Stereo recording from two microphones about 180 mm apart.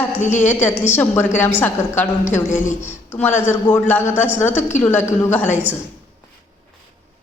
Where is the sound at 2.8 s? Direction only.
10° left (ahead or behind).